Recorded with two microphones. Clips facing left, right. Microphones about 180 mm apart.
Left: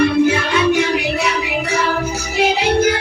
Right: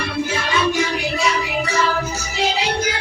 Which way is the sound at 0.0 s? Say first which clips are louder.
Left 9 dB; 60° left (ahead or behind).